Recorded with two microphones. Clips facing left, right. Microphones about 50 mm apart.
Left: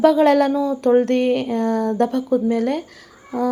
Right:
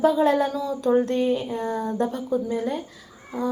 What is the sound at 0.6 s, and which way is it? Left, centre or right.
Speech, left.